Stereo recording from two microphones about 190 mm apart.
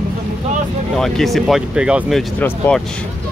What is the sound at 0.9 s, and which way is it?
Speech, centre (ahead or behind).